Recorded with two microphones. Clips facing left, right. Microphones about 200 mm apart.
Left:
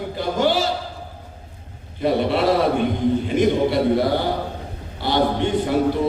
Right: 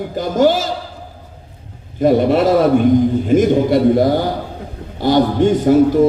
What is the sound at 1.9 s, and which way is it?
A man's voice, 45° right (ahead or behind).